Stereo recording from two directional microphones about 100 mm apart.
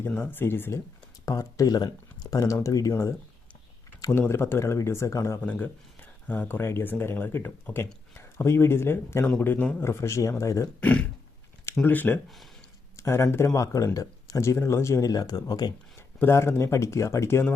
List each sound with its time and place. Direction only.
0.2 s speech: 20° left (ahead or behind)
1.2 s speech: 35° left (ahead or behind)
4.3 s speech: 25° left (ahead or behind)
5.4 s speech: 20° left (ahead or behind)
9.8 s speech: 30° left (ahead or behind)
10.8 s speech: 15° left (ahead or behind); by 15.7 s 40° left (ahead or behind)
16.1 s speech: 25° left (ahead or behind)